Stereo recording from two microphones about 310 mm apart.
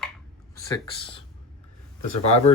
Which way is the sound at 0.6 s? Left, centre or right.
Centre.